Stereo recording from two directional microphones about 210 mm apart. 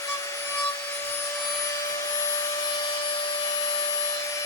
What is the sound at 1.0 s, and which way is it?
Vacuum cleaner, 10° left (ahead or behind).